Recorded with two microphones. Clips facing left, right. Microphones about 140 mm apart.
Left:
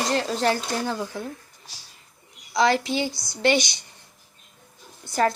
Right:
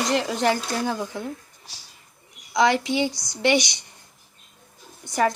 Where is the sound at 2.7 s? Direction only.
20° right (ahead or behind).